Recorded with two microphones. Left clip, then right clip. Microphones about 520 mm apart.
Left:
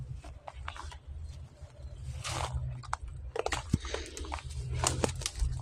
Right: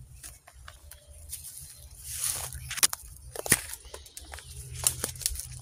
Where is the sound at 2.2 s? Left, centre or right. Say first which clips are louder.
Left 1 dB; right.